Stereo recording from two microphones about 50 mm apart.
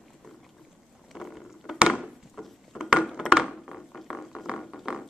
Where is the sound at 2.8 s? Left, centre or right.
Centre.